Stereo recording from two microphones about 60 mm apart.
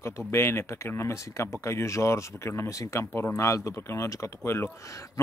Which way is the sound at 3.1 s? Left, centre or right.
Left.